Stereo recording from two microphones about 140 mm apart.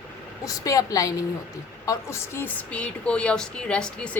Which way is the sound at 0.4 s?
25° left (ahead or behind).